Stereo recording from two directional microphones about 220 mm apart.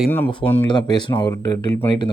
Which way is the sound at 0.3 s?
25° left (ahead or behind).